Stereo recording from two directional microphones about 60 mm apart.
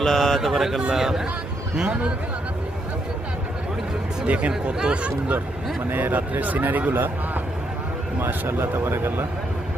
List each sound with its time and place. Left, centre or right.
0.0 s a sound: centre
0.4 s a man's voice: centre
4.3 s speech: right
5.9 s speech: right
8.2 s speech: right